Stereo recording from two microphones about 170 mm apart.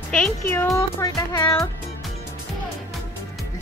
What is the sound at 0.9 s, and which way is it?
Music, 25° left (ahead or behind).